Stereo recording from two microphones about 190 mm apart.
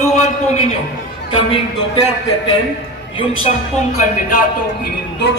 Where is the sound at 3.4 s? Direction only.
40° left (ahead or behind).